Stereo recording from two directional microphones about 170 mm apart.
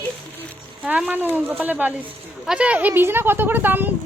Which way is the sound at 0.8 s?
10° right (ahead or behind).